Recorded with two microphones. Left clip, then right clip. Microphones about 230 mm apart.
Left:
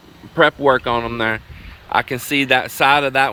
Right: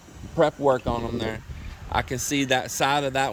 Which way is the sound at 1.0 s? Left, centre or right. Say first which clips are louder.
Left 9 dB; left.